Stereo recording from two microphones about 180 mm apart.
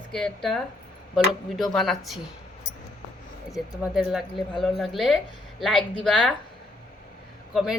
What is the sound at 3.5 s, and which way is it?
A woman's voice, centre (ahead or behind).